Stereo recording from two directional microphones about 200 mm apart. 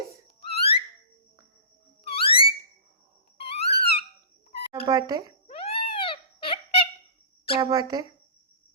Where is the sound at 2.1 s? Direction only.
30° left (ahead or behind).